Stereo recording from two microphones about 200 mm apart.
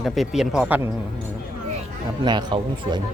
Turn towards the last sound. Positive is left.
turn(degrees=-20)  # may be behind; listen again after turning